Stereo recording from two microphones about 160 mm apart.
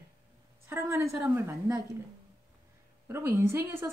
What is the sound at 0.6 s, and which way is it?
Speech, 15° right (ahead or behind).